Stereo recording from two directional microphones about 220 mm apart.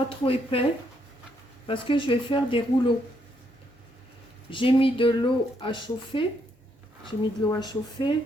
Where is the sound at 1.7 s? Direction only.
25° left (ahead or behind).